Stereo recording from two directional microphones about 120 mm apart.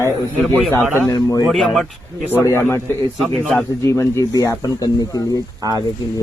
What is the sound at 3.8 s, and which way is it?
Speech, 20° left (ahead or behind).